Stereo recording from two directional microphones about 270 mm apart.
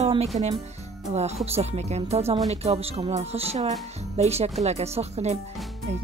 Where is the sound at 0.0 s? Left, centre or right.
Right.